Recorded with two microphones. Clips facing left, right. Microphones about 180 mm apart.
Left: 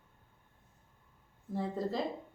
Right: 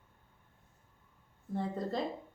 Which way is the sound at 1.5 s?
Centre (ahead or behind).